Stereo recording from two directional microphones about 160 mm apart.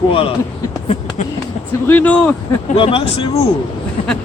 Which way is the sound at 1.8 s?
10° left (ahead or behind).